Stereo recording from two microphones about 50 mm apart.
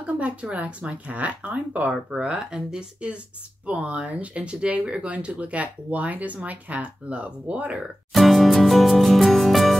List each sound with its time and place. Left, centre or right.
0.0 s speech: right
8.1 s music: centre